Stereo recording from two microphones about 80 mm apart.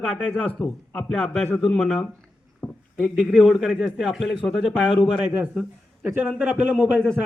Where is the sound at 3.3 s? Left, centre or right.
Centre.